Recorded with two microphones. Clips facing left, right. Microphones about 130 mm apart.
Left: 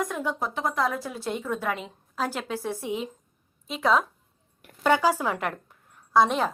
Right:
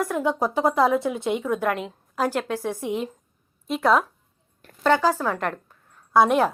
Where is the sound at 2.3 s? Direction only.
10° left (ahead or behind).